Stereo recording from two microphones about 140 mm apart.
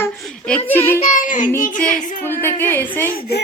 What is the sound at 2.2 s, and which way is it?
Speech, 15° left (ahead or behind).